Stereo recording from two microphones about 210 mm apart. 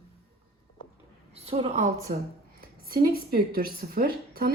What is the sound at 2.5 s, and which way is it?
Speech, 45° right (ahead or behind).